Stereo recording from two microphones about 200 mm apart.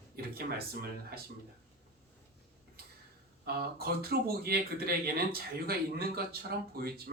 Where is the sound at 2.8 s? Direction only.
50° right (ahead or behind).